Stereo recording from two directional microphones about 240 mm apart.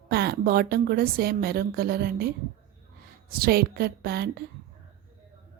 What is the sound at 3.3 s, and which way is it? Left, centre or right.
A woman's voice, right.